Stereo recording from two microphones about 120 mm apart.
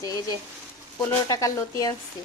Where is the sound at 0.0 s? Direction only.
30° left (ahead or behind).